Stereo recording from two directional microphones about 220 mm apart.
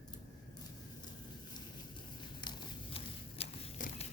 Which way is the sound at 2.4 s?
25° left (ahead or behind).